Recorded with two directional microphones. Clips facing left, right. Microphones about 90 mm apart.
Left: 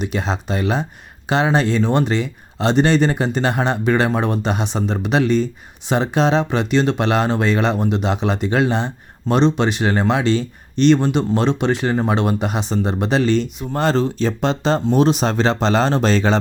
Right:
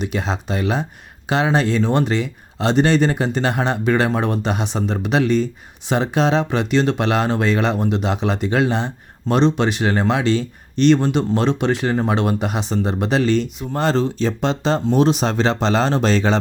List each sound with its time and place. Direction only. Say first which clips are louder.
0.0 s speech: left 1 dB; 30° left (ahead or behind)
13.7 s speech: left 1 dB; 50° left (ahead or behind)